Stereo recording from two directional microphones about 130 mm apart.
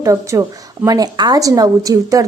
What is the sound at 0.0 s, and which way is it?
A woman's voice, 25° right (ahead or behind).